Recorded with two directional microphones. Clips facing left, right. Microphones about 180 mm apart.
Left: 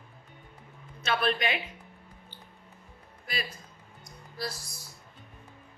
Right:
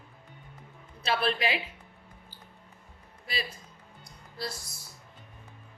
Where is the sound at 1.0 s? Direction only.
30° right (ahead or behind).